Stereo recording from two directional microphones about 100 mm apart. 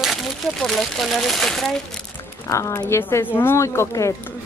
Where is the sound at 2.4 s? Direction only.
30° left (ahead or behind).